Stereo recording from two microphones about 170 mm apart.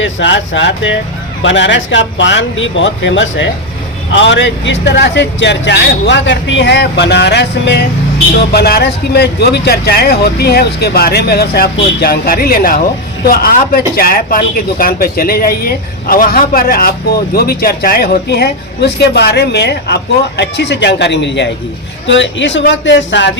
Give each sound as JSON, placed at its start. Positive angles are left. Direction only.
{"t": 0.0, "sound": "a man's voice", "side_deg": 90}
{"t": 8.4, "sound": "a man's voice", "side_deg": 70}